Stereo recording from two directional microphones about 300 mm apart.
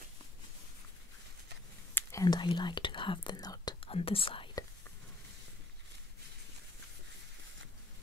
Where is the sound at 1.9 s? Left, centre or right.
Centre.